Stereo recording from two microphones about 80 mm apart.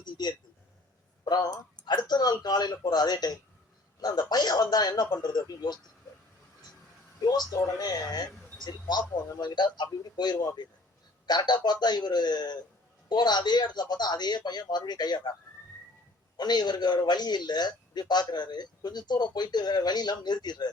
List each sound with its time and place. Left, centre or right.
0.0 s a sound: left
1.2 s a man's voice: left
7.2 s a man's voice: left
8.5 s a man's voice: left
16.4 s a man's voice: left